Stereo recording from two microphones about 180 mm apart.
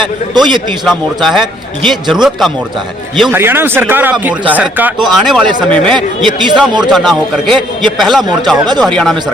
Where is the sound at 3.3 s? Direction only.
10° right (ahead or behind).